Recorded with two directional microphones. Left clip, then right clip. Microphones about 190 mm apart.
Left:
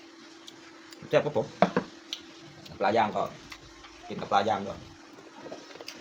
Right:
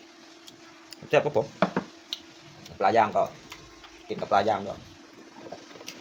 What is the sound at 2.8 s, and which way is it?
Speech, 35° right (ahead or behind).